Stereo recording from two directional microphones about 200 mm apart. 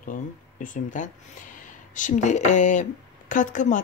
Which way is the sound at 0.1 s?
40° left (ahead or behind).